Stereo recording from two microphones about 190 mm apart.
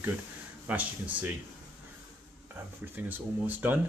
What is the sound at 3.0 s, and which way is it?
Speech, 10° right (ahead or behind).